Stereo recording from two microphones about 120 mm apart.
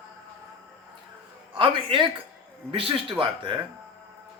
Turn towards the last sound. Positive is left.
turn(degrees=-45)  # may be behind; listen again after turning